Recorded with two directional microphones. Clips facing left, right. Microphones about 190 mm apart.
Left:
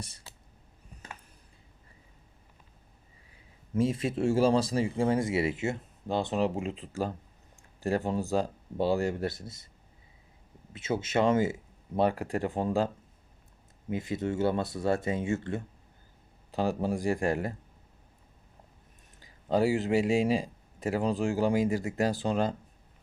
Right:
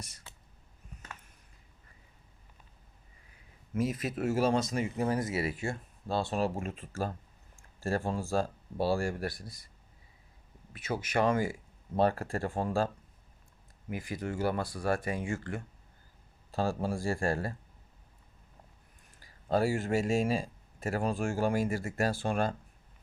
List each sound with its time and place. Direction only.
0.0 s speech: 30° left (ahead or behind)
3.8 s speech: 30° left (ahead or behind)
10.7 s speech: 25° left (ahead or behind)
13.9 s speech: 25° left (ahead or behind)
19.2 s speech: 15° left (ahead or behind)